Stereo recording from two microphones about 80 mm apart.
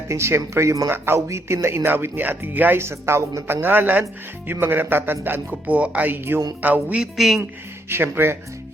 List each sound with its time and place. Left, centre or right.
0.1 s speech: right
7.0 s speech: centre
7.9 s speech: right